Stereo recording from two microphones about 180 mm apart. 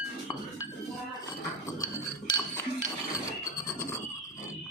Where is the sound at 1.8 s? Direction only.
20° left (ahead or behind).